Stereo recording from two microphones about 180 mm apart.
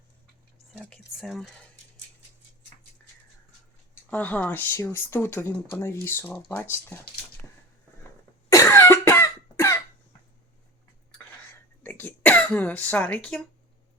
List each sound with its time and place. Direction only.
0.7 s speech: 5° left (ahead or behind)
4.1 s speech: 10° left (ahead or behind)
8.4 s cough: 15° left (ahead or behind)
11.8 s throat clearing: 10° left (ahead or behind)